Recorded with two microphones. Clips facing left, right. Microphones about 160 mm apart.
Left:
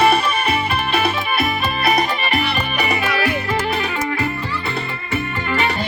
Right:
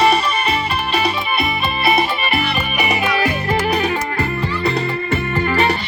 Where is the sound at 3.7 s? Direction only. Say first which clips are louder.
Right 2 dB; 40° right (ahead or behind).